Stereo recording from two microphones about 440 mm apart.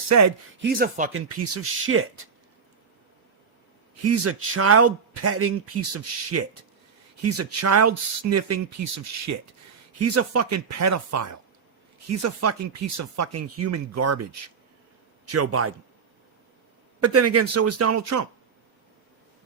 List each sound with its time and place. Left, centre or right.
0.6 s speech: centre
1.1 s speech: right
4.0 s a man's voice: right
15.3 s a man's voice: right
17.0 s a man's voice: right